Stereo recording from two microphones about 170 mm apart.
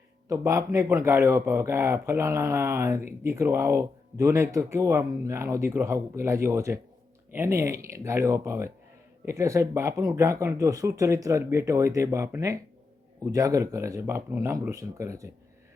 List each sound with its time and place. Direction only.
0.3 s speech: 20° right (ahead or behind)